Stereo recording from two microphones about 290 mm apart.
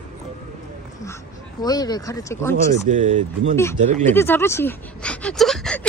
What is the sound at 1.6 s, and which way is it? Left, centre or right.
Speech, centre.